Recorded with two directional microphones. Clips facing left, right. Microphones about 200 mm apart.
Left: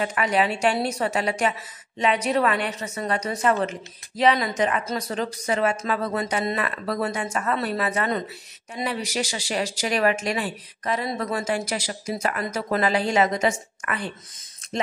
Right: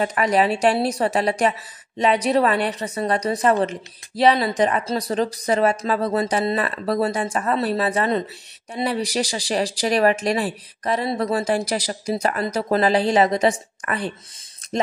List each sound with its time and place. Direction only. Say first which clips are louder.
0.0 s a woman's voice: right 4 dB; 40° right (ahead or behind)